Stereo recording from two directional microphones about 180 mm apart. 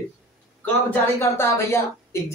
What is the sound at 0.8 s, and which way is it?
Speech, 15° left (ahead or behind).